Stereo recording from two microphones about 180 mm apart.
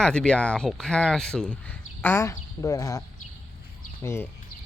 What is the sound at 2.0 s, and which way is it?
Speech, 15° left (ahead or behind).